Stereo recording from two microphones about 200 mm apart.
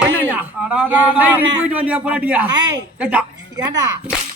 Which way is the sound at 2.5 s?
20° right (ahead or behind).